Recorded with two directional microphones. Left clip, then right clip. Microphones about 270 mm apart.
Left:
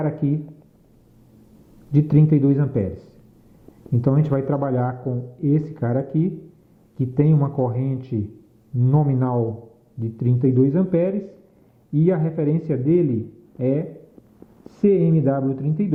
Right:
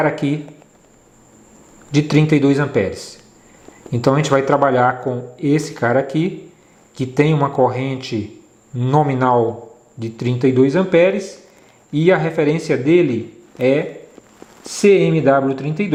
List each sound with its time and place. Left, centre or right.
0.0 s speech: centre
1.9 s speech: centre
10.0 s a man's voice: centre